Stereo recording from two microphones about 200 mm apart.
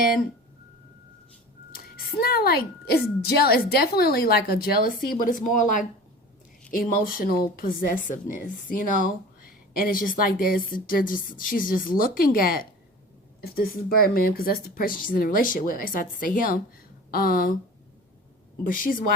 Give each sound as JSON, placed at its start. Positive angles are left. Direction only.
{"t": 0.0, "sound": "a woman's voice", "side_deg": 45}
{"t": 1.7, "sound": "a woman's voice", "side_deg": 50}
{"t": 18.6, "sound": "a woman's voice", "side_deg": 45}